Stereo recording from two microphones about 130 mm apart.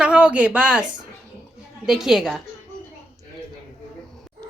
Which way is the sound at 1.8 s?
5° right (ahead or behind).